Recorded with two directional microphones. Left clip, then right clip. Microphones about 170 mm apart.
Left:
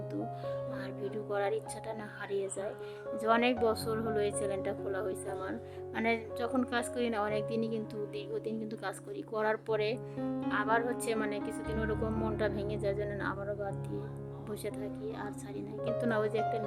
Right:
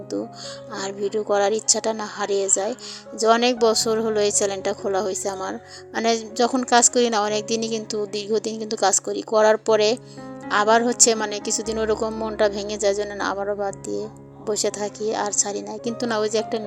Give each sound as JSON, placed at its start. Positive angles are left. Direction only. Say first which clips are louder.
{"t": 0.8, "sound": "a woman's voice", "louder": "right 14 dB", "side_deg": -40}